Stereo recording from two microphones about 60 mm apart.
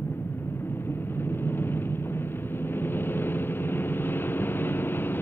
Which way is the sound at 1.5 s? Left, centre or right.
Left.